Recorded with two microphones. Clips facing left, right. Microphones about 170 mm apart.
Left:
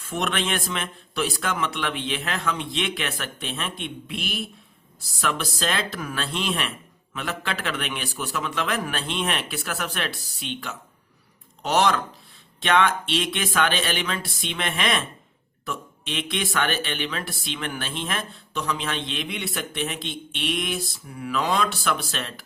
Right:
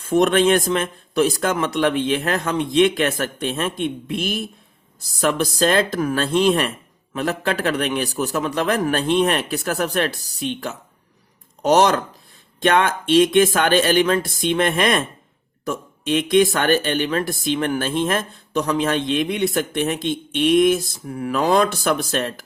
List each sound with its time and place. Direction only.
0.0 s speech: 45° right (ahead or behind)